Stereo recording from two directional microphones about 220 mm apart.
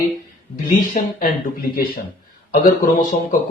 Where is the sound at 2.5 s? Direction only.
35° left (ahead or behind).